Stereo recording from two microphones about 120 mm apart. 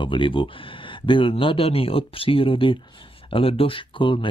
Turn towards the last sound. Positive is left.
turn(degrees=45)  # may be behind; listen again after turning